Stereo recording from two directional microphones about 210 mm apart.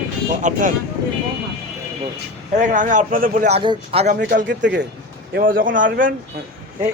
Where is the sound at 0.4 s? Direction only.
35° right (ahead or behind).